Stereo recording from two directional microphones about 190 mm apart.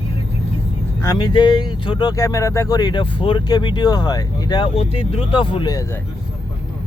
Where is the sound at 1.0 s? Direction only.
20° left (ahead or behind).